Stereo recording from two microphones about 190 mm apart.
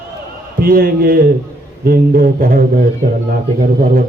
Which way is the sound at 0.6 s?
50° right (ahead or behind).